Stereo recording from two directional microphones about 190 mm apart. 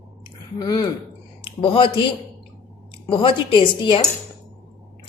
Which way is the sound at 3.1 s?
25° left (ahead or behind).